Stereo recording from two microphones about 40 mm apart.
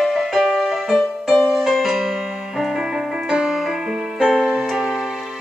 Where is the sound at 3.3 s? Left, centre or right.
Centre.